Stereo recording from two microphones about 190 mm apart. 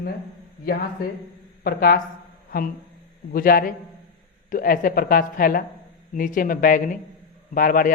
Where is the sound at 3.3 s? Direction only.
50° left (ahead or behind).